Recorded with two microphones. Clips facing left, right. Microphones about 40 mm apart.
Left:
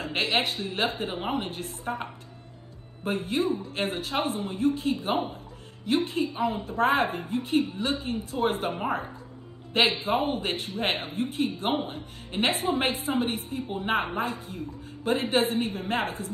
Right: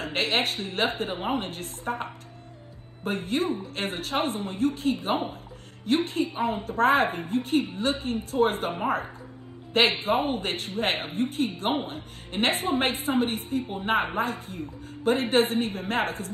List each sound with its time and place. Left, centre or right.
0.2 s a woman's voice: right
3.0 s a woman's voice: right
9.8 s a woman's voice: right